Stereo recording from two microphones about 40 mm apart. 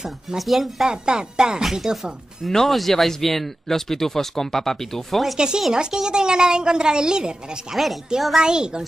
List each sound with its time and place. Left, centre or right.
0.4 s speech: centre
0.8 s a woman's voice: centre
1.6 s speech: centre
2.5 s speech: centre
5.7 s a woman's voice: centre
7.7 s speech: centre
8.4 s a woman's voice: right